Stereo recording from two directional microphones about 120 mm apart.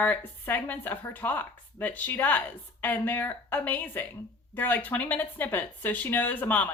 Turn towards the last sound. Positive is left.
turn(degrees=15)  # may be behind; listen again after turning